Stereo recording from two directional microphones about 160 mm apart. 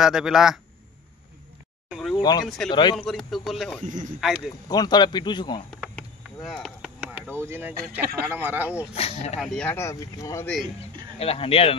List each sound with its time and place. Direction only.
0.0 s speech: 5° right (ahead or behind)
1.9 s a sound: centre (ahead or behind)
2.4 s speech: centre (ahead or behind)
2.7 s speech: 30° left (ahead or behind)
3.0 s speech: centre (ahead or behind)
3.8 s speech: 55° right (ahead or behind)
4.6 s speech: 25° left (ahead or behind)
5.9 s a sound: centre (ahead or behind)
7.4 s speech: 15° right (ahead or behind)
8.9 s speech: 40° left (ahead or behind)
9.4 s speech: 5° left (ahead or behind)
9.8 s speech: 20° left (ahead or behind)
11.1 s speech: 35° left (ahead or behind)